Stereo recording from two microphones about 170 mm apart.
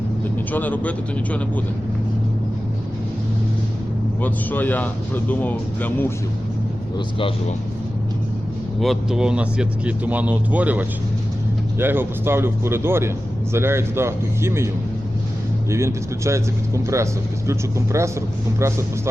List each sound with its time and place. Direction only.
0.3 s speech: 10° left (ahead or behind)
4.2 s speech: 10° left (ahead or behind)
7.2 s speech: 30° left (ahead or behind)
8.8 s speech: centre (ahead or behind)
15.7 s speech: 15° right (ahead or behind)